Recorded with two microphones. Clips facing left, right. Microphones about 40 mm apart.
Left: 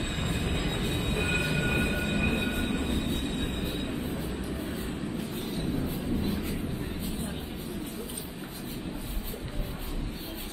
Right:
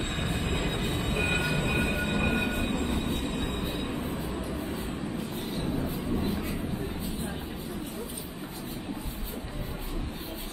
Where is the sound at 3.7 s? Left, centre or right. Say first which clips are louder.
Right 1 dB; right.